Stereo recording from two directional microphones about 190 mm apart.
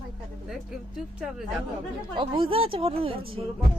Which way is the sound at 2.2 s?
30° right (ahead or behind).